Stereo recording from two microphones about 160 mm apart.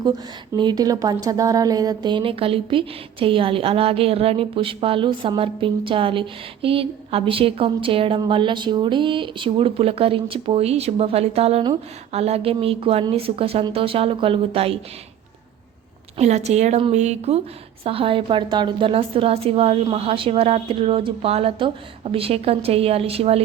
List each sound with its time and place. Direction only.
0.5 s a woman's voice: 25° right (ahead or behind)
16.1 s a woman's voice: 45° right (ahead or behind)